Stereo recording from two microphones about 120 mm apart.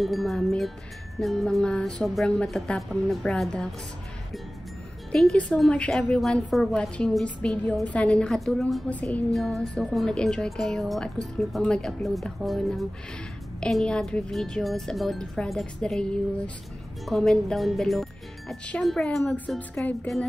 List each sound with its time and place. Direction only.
0.0 s a woman's voice: centre (ahead or behind)
5.1 s a woman's voice: 5° left (ahead or behind)